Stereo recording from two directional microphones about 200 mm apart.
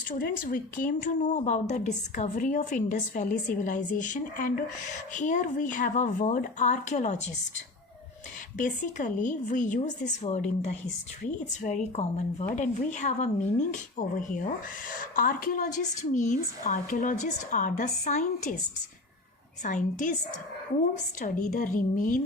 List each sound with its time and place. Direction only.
0.1 s speech: 45° left (ahead or behind)
8.5 s speech: 40° left (ahead or behind)
19.6 s speech: 40° left (ahead or behind)